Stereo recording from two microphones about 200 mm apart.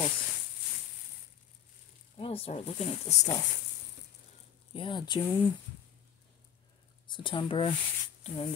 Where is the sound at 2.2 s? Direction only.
30° left (ahead or behind).